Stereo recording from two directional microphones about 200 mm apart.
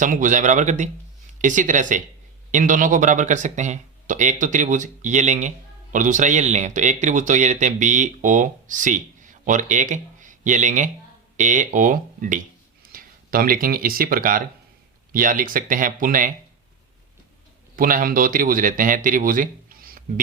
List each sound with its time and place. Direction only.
0.0 s speech: 40° right (ahead or behind)
17.7 s speech: 45° right (ahead or behind)